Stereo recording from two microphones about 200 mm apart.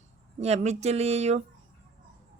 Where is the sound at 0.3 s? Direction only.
35° right (ahead or behind).